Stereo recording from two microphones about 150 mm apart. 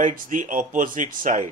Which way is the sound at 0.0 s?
65° right (ahead or behind).